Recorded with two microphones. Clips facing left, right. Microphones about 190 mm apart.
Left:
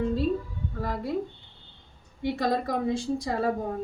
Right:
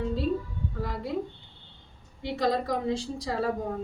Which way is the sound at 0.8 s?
50° left (ahead or behind).